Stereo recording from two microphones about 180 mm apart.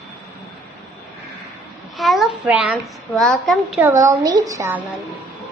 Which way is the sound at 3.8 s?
15° right (ahead or behind).